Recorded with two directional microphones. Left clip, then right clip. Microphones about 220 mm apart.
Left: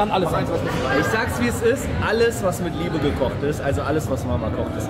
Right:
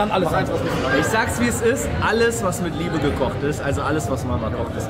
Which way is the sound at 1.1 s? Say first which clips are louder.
Right 2 dB; 15° right (ahead or behind).